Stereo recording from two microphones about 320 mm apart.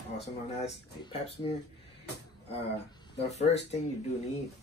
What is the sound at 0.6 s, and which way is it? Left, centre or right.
Speech, centre.